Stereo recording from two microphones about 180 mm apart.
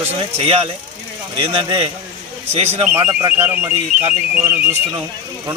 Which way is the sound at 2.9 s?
15° right (ahead or behind).